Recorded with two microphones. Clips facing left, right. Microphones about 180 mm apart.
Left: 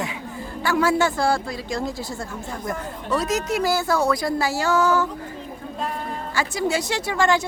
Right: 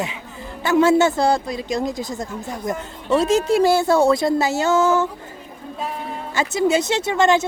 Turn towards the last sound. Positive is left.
turn(degrees=-20)  # may be behind; listen again after turning